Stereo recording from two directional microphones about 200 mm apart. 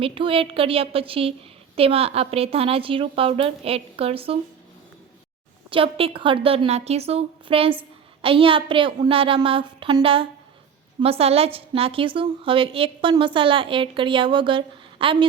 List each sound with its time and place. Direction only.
0.0 s a woman's voice: 25° right (ahead or behind)
5.7 s a woman's voice: 25° right (ahead or behind)